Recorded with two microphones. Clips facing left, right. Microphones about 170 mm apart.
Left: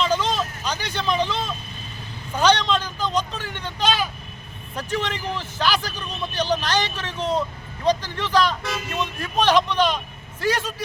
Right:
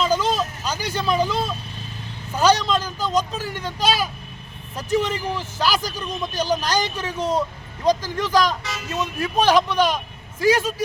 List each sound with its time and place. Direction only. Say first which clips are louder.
0.0 s vehicle: right 2 dB; 10° right (ahead or behind)
2.4 s a man's voice: right 1 dB; 10° right (ahead or behind)